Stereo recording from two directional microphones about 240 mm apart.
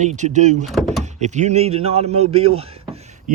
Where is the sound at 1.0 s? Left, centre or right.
Right.